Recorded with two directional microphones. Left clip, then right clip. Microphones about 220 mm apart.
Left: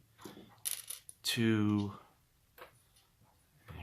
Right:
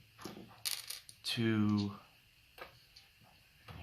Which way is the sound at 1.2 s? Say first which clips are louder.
Left 3 dB; 50° left (ahead or behind).